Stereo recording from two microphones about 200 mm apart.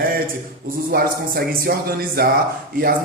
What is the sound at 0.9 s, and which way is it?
Speech, 50° right (ahead or behind).